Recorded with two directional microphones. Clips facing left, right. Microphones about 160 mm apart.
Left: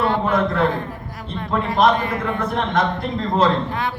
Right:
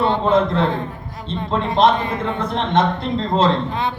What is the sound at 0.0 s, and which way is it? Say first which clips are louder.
A man's voice: right 3 dB; 25° right (ahead or behind).